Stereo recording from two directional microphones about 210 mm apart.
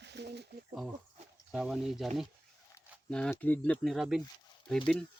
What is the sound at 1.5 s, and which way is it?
Speech, centre (ahead or behind).